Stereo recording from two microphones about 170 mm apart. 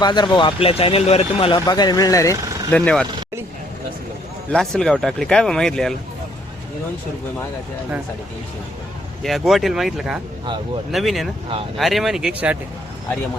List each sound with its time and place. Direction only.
0.0 s speech: 25° left (ahead or behind)
2.7 s speech: 5° left (ahead or behind)
4.5 s speech: 5° left (ahead or behind)
9.2 s speech: centre (ahead or behind)